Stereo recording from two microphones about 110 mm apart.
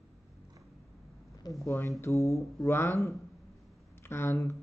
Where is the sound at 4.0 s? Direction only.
20° left (ahead or behind).